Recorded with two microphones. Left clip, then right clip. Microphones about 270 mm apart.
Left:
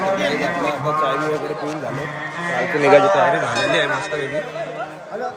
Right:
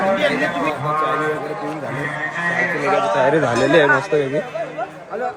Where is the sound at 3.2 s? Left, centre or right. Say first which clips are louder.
Right 2 dB; centre.